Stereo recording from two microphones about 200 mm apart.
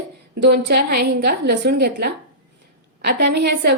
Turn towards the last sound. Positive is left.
turn(degrees=-55)  # may be behind; listen again after turning